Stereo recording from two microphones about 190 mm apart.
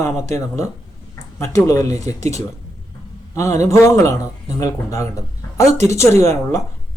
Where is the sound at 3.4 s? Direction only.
15° left (ahead or behind).